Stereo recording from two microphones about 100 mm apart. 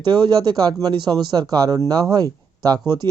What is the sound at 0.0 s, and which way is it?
Speech, 50° right (ahead or behind).